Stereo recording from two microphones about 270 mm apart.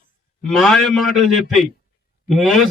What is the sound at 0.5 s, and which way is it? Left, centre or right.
A man's voice, centre.